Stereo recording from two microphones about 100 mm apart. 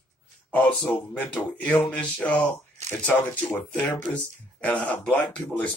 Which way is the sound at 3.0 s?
20° left (ahead or behind).